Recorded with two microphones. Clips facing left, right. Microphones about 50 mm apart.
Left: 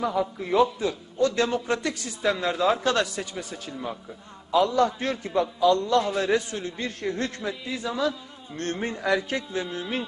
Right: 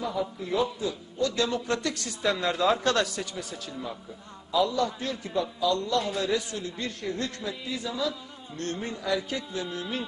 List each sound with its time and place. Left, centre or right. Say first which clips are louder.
0.0 s a man's voice: left 4 dB; left
1.2 s a man's voice: left 4 dB; left
1.6 s speech: left 2 dB; centre
4.5 s a man's voice: left 4 dB; left